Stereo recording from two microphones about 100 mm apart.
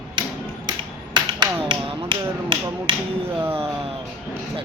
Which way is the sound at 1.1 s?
50° right (ahead or behind).